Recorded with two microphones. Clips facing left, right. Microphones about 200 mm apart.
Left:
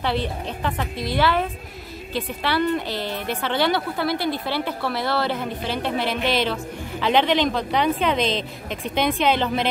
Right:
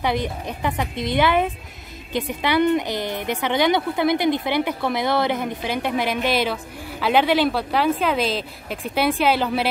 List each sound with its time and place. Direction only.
0.0 s a woman's voice: 15° right (ahead or behind)